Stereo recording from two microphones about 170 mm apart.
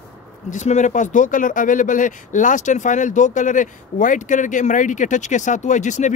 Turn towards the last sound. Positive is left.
turn(degrees=45)  # may be behind; listen again after turning